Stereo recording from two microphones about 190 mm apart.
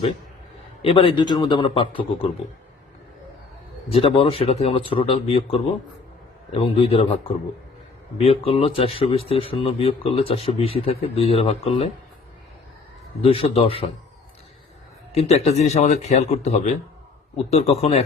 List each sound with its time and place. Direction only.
0.8 s speech: 30° left (ahead or behind)
3.9 s a man's voice: 30° left (ahead or behind)
8.2 s speech: 30° left (ahead or behind)
13.2 s speech: 30° left (ahead or behind)
15.1 s a man's voice: 35° left (ahead or behind)